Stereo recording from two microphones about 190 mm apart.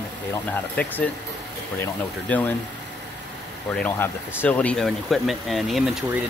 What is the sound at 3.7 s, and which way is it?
Speech, 10° left (ahead or behind).